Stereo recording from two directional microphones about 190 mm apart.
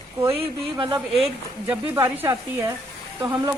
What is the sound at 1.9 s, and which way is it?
Speech, 15° right (ahead or behind).